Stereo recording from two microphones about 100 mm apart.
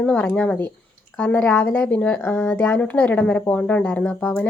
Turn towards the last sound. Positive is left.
turn(degrees=20)  # may be behind; listen again after turning